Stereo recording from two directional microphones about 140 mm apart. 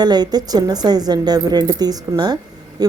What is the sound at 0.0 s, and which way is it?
A woman's voice, 30° right (ahead or behind).